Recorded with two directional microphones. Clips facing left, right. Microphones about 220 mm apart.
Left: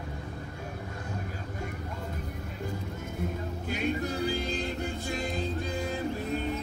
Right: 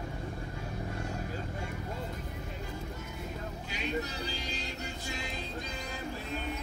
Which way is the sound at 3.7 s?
50° left (ahead or behind).